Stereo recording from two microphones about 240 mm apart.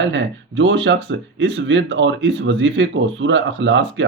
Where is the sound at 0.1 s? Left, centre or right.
Right.